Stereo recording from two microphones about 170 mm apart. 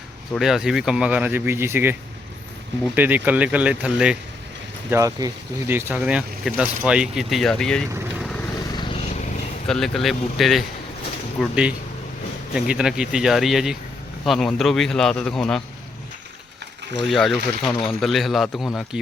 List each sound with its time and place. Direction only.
0.3 s speech: centre (ahead or behind)
4.9 s speech: 20° right (ahead or behind); by 7.9 s 5° left (ahead or behind)
8.7 s vehicle: 30° left (ahead or behind)
9.6 s speech: centre (ahead or behind)
17.0 s speech: centre (ahead or behind)